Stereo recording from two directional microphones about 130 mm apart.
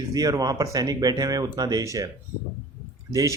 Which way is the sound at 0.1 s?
30° right (ahead or behind).